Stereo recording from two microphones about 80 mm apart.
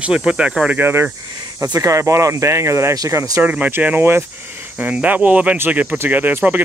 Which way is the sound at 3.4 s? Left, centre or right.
Right.